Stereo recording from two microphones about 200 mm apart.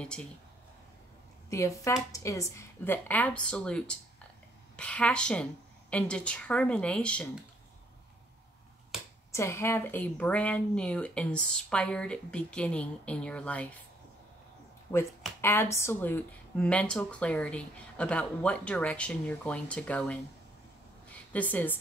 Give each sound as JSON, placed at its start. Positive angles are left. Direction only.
{"t": 0.0, "sound": "speech", "side_deg": 5}
{"t": 1.5, "sound": "speech", "side_deg": 15}
{"t": 9.3, "sound": "speech", "side_deg": 15}
{"t": 14.9, "sound": "speech", "side_deg": 10}
{"t": 21.3, "sound": "speech", "side_deg": 10}